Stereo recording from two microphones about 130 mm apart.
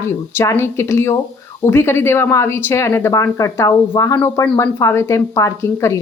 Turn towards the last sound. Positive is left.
turn(degrees=20)  # may be behind; listen again after turning